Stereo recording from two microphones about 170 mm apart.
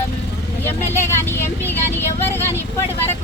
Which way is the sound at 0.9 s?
15° left (ahead or behind).